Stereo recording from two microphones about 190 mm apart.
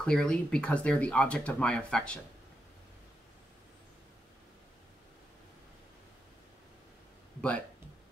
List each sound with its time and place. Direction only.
0.0 s speech: 5° left (ahead or behind)